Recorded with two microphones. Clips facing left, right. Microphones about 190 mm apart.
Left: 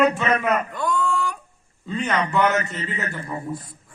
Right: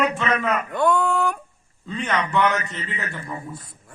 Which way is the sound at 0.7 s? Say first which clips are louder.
Right 4 dB; 60° right (ahead or behind).